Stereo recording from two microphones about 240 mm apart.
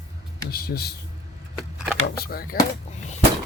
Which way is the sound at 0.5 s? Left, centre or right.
Left.